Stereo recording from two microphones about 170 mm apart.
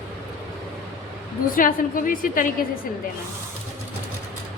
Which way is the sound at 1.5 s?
55° left (ahead or behind).